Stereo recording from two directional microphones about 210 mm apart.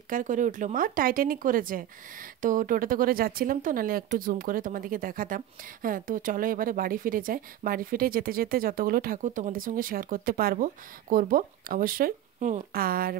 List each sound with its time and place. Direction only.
0.1 s speech: 40° right (ahead or behind)